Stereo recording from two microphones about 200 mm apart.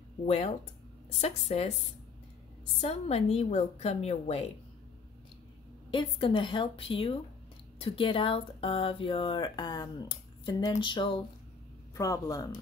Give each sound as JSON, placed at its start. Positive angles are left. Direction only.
{"t": 1.1, "sound": "a woman's voice", "side_deg": 30}
{"t": 2.8, "sound": "a woman's voice", "side_deg": 30}
{"t": 5.9, "sound": "a man's voice", "side_deg": 25}